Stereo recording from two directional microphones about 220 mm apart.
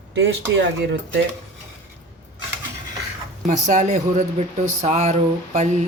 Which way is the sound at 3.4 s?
35° right (ahead or behind).